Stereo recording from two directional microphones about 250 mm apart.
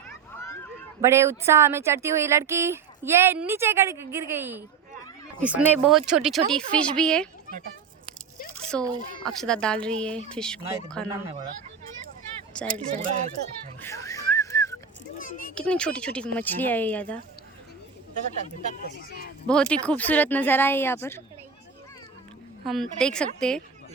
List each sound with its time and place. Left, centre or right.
1.0 s speech: centre
8.7 s speech: centre
12.5 s a sound: centre
13.8 s wheeze: centre
15.2 s a sound: left
15.5 s speech: centre
18.9 s speech: left
19.5 s speech: centre
22.6 s speech: centre